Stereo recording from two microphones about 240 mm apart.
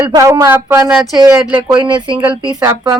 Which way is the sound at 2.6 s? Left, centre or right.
Centre.